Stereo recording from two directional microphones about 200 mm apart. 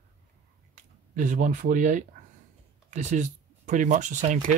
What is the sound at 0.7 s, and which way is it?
Speech, 40° right (ahead or behind).